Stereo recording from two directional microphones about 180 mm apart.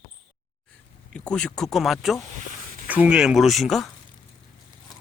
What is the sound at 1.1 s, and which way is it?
Speech, 5° left (ahead or behind).